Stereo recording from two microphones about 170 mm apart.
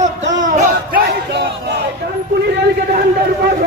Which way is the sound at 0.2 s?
90° right.